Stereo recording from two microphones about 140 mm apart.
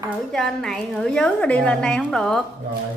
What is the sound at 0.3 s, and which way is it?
A woman's voice, 5° left (ahead or behind).